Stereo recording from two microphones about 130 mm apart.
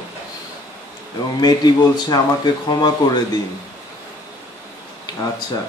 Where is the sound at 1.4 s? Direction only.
30° left (ahead or behind).